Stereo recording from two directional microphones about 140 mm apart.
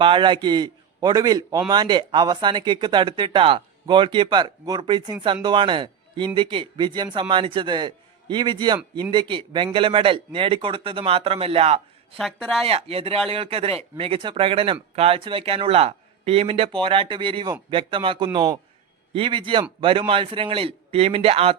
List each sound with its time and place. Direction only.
0.0 s a man's voice: 35° right (ahead or behind)
12.1 s speech: 5° left (ahead or behind)
12.6 s speech: 45° right (ahead or behind)